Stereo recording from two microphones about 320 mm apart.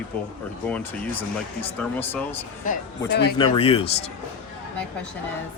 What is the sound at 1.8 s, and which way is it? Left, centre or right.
Speech, centre.